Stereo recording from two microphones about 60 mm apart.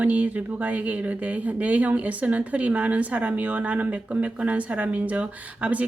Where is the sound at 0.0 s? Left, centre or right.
Right.